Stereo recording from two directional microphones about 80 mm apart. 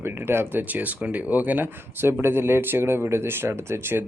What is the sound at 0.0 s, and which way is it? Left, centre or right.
Speech, right.